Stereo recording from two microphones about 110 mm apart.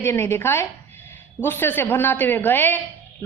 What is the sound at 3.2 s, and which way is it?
Music, 20° left (ahead or behind).